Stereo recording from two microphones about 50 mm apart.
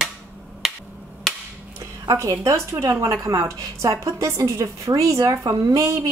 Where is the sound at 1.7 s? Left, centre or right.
Right.